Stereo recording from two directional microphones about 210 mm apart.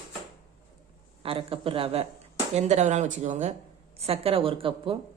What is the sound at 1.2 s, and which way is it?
Speech, 25° right (ahead or behind).